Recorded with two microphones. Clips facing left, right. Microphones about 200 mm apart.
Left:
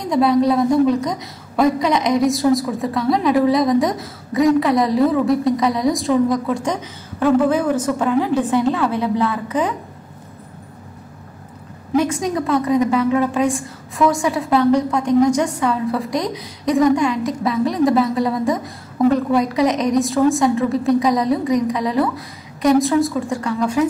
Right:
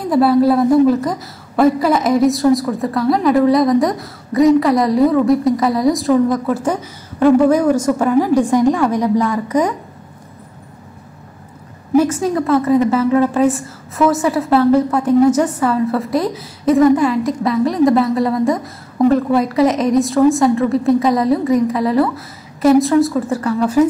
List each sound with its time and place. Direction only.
0.0 s a woman's voice: 5° right (ahead or behind)
12.0 s a woman's voice: 5° right (ahead or behind)